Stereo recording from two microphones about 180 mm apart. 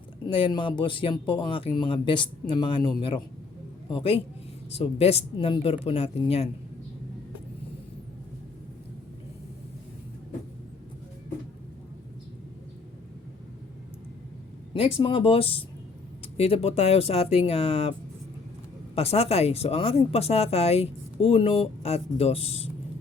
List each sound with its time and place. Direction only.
0.3 s speech: 30° left (ahead or behind)
14.7 s speech: 30° left (ahead or behind)
18.9 s speech: 35° left (ahead or behind)